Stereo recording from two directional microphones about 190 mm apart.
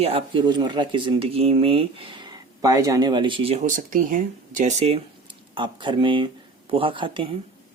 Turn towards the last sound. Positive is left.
turn(degrees=-25)  # may be behind; listen again after turning